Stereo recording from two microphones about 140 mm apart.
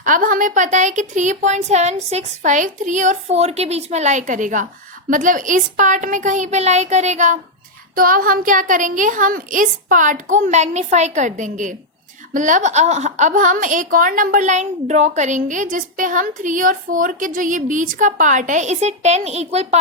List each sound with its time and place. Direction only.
0.0 s a woman's voice: 75° right (ahead or behind); by 7.3 s 55° right (ahead or behind)
7.9 s a woman's voice: 90° right; by 19.8 s 50° right (ahead or behind)